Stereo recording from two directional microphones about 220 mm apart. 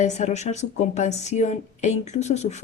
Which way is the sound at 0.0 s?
30° left (ahead or behind).